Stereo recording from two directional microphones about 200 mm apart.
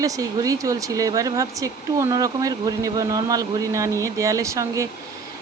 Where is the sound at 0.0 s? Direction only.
15° right (ahead or behind).